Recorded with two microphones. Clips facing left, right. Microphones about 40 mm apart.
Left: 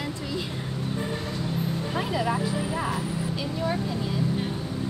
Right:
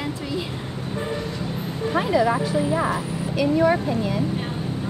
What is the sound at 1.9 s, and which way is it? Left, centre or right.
A woman's voice, right.